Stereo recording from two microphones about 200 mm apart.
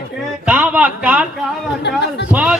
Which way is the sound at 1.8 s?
60° left (ahead or behind).